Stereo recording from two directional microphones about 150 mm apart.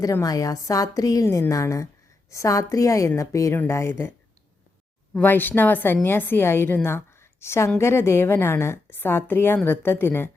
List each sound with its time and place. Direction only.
0.0 s a woman's voice: 20° left (ahead or behind)
5.2 s a woman's voice: 10° left (ahead or behind)